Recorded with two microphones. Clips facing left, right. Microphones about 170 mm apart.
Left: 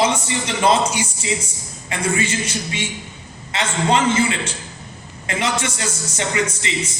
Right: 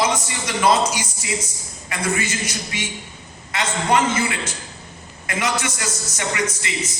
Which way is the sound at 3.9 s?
25° left (ahead or behind).